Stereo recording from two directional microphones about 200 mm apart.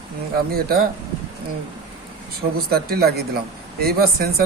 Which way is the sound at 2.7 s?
50° right (ahead or behind).